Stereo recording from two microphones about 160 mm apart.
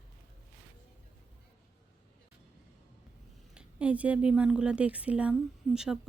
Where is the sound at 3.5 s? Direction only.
10° right (ahead or behind).